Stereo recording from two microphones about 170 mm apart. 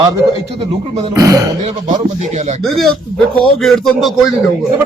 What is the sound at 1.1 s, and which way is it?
Speech, 20° right (ahead or behind).